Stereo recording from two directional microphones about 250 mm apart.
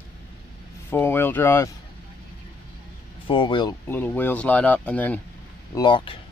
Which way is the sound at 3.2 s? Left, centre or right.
Centre.